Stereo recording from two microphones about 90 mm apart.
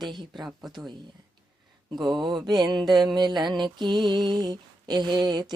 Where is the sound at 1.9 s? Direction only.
55° right (ahead or behind).